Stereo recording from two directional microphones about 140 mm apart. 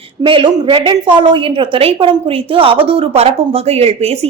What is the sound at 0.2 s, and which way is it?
A woman's voice, 35° right (ahead or behind).